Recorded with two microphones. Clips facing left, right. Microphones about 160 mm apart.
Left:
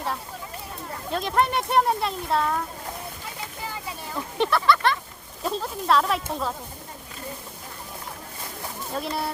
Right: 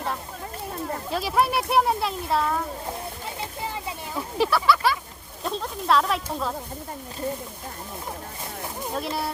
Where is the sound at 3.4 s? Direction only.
25° right (ahead or behind).